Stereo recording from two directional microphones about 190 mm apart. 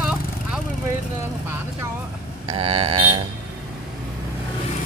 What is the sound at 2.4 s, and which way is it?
Livestock, 30° right (ahead or behind).